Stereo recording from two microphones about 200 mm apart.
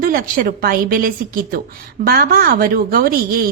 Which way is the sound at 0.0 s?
45° right (ahead or behind).